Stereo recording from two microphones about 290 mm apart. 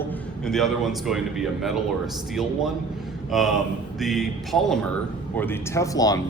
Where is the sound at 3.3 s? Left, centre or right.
Centre.